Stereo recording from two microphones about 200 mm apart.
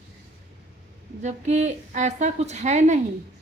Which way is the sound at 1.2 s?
35° right (ahead or behind).